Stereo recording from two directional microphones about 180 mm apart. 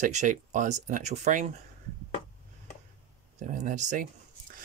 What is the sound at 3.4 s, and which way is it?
Speech, 45° right (ahead or behind).